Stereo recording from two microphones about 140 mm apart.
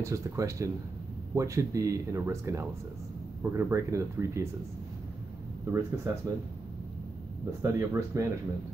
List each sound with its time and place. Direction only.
0.0 s speech: 20° right (ahead or behind)
5.7 s speech: 20° right (ahead or behind)
7.6 s speech: 20° right (ahead or behind)